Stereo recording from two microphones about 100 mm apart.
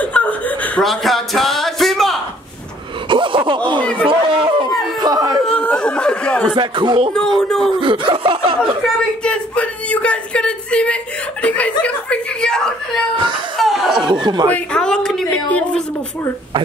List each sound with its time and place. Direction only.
0.0 s chuckle: 15° left (ahead or behind)
0.8 s speech: centre (ahead or behind)
3.1 s speech: 55° right (ahead or behind)
3.8 s speech: 15° left (ahead or behind)
4.1 s chatter: 55° right (ahead or behind)
5.0 s a sound: 35° right (ahead or behind)
5.4 s speech: 10° left (ahead or behind)
6.5 s speech: 50° right (ahead or behind)
7.2 s speech: 5° left (ahead or behind)
7.8 s snicker: 60° right (ahead or behind)
9.2 s speech: 10° left (ahead or behind)
14.2 s speech: 45° right (ahead or behind)
14.5 s speech: 10° left (ahead or behind)